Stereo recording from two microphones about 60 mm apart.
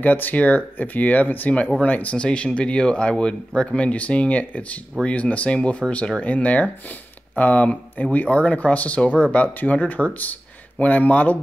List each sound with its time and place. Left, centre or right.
0.0 s speech: left